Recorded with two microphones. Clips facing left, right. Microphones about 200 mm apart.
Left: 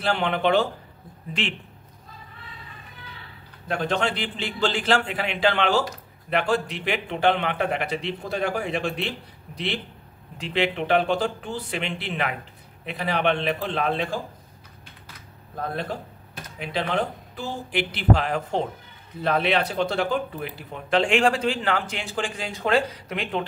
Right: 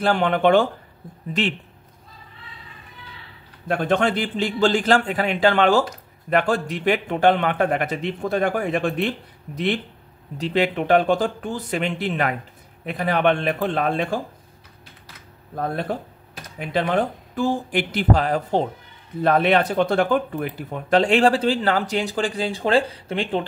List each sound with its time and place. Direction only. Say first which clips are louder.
0.0 s a man's voice: right 5 dB; 45° right (ahead or behind)
3.6 s a man's voice: right 5 dB; 50° right (ahead or behind)
10.3 s a man's voice: right 4 dB; 40° right (ahead or behind)
15.6 s a man's voice: right 4 dB; 50° right (ahead or behind)
19.2 s speech: right 5 dB; 50° right (ahead or behind); by 23.4 s 30° right (ahead or behind)